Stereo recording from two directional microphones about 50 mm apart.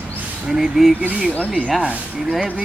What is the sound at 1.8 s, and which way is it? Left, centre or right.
Speech, right.